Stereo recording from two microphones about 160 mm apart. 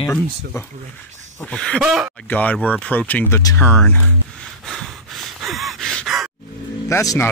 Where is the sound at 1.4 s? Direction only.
10° left (ahead or behind).